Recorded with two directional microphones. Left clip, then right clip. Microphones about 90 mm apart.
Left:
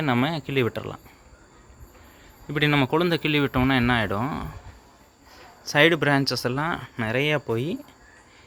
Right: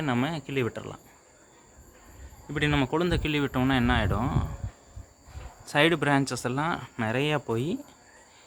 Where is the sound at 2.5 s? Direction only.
40° left (ahead or behind); by 4.2 s 25° left (ahead or behind).